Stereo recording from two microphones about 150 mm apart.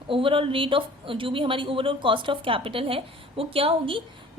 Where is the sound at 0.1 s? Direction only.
35° right (ahead or behind).